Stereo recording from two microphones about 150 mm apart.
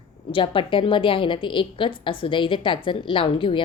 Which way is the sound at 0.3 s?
35° left (ahead or behind).